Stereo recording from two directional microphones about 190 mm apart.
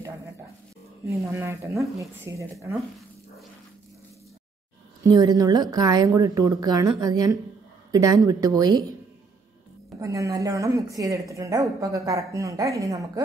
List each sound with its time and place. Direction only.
1.0 s a woman's voice: 15° right (ahead or behind)
5.1 s a woman's voice: 20° right (ahead or behind)
9.9 s a woman's voice: 15° right (ahead or behind)